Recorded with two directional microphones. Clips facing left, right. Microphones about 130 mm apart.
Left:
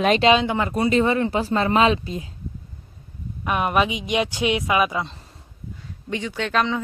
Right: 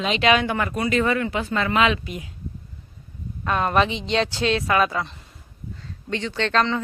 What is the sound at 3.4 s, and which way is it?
Speech, 15° left (ahead or behind).